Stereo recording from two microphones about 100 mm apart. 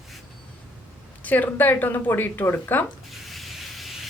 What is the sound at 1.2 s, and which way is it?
Speech, 15° left (ahead or behind).